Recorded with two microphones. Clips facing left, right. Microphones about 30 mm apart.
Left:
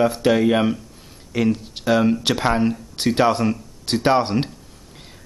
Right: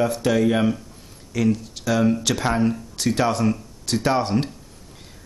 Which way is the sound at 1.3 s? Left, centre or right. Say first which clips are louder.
Left 1 dB; left.